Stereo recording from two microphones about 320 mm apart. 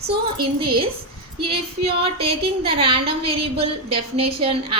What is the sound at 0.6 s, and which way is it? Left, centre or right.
A woman's voice, centre.